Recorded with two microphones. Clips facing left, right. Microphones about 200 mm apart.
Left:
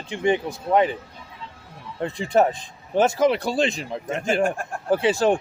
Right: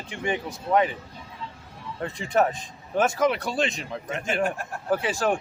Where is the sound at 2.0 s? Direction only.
30° left (ahead or behind).